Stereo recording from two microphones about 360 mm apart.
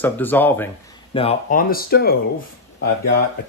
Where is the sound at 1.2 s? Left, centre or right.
Centre.